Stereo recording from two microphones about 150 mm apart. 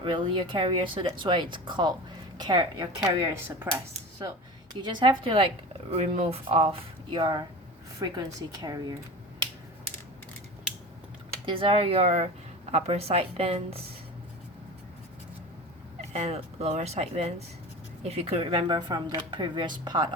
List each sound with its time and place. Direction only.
0.0 s a woman's voice: 35° right (ahead or behind)
3.2 s speech: 20° right (ahead or behind)
4.7 s a woman's voice: 30° right (ahead or behind)
11.4 s speech: 35° right (ahead or behind)
16.1 s speech: 45° right (ahead or behind)